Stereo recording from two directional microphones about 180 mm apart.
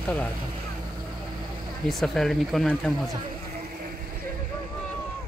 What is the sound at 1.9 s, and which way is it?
Speech, centre (ahead or behind).